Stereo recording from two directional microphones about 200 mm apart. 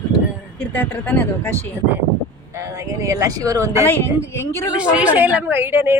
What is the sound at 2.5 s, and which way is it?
A woman's voice, 15° right (ahead or behind).